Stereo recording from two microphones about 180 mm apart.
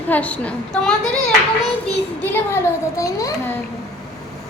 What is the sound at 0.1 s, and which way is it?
Speech, 10° left (ahead or behind).